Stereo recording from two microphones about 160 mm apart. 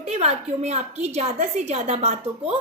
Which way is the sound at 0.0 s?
40° right (ahead or behind).